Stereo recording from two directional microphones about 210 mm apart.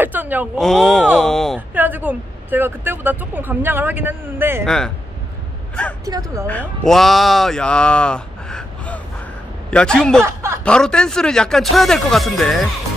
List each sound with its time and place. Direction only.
0.0 s speech: 10° right (ahead or behind)
4.6 s speech: 5° left (ahead or behind)
6.0 s speech: 15° right (ahead or behind)
6.4 s speech: 5° left (ahead or behind)
10.2 s speech: 15° right (ahead or behind)
10.6 s speech: 5° left (ahead or behind)